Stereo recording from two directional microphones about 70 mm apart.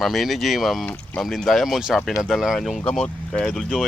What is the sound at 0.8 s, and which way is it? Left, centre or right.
Speech, centre.